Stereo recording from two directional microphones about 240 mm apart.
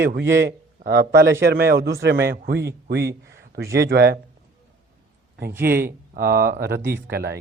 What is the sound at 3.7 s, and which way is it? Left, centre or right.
Speech, right.